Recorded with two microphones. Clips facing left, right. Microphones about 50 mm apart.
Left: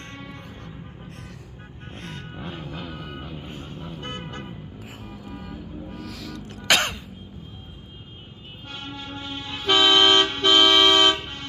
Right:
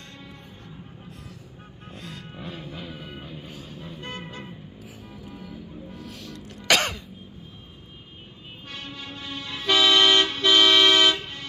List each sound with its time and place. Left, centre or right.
2.0 s music: left
2.3 s vehicle: left
5.9 s music: left
6.7 s throat clearing: centre
8.7 s toot: left